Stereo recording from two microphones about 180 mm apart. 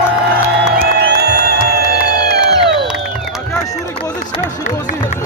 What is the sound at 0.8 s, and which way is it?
Music, 60° right (ahead or behind).